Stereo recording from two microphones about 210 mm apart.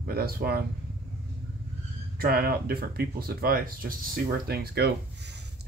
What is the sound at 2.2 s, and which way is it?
Speech, 45° right (ahead or behind).